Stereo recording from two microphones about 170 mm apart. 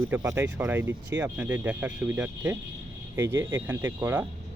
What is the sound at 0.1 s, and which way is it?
Speech, 15° right (ahead or behind).